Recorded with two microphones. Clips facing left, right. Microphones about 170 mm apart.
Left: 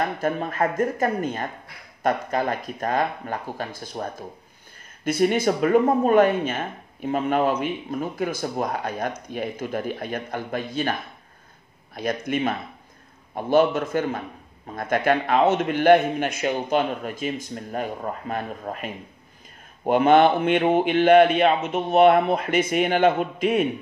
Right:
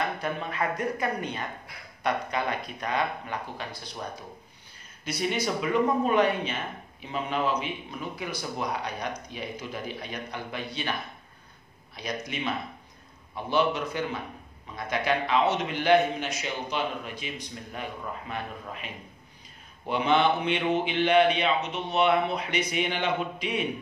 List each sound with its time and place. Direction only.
0.0 s a man's voice: 45° left (ahead or behind)